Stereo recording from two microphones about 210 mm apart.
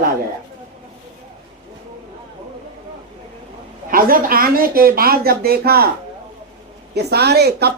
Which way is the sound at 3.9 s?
45° right (ahead or behind).